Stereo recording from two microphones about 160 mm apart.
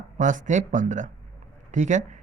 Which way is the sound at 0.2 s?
50° right (ahead or behind).